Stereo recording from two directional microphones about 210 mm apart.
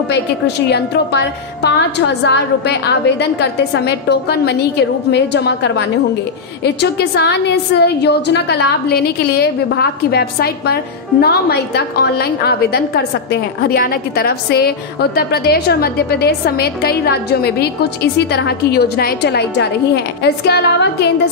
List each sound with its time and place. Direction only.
0.1 s a woman's voice: 50° left (ahead or behind)